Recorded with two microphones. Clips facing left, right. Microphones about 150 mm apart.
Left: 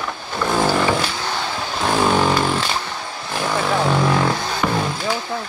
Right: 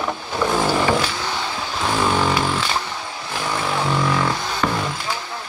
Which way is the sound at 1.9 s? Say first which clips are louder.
Left 3 dB; 15° left (ahead or behind).